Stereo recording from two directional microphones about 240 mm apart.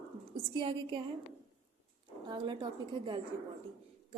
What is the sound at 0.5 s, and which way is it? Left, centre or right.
Speech, right.